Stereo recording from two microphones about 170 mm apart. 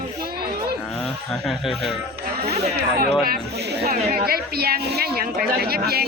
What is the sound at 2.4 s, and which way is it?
Speech, 70° right (ahead or behind).